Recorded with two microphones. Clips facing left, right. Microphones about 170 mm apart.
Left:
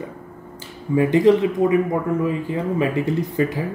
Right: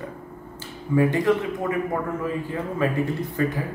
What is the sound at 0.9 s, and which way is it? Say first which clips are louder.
Speech: left 5 dB; 20° left (ahead or behind).